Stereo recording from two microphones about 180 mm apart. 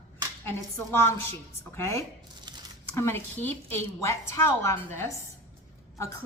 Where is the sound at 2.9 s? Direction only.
10° left (ahead or behind).